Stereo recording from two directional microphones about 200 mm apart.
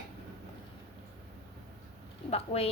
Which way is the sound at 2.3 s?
30° left (ahead or behind).